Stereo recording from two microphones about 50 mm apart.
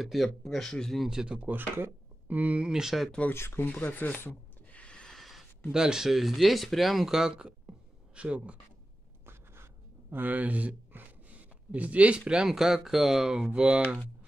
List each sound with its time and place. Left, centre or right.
0.0 s speech: centre
1.1 s speech: right
1.5 s speech: right
2.7 s speech: centre
3.3 s speech: left
3.6 s speech: left
4.7 s a sound: left
5.1 s a sound: centre
5.7 s speech: centre
10.1 s speech: right
12.4 s speech: centre